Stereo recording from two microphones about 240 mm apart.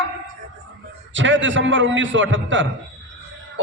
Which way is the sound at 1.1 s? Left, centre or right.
Right.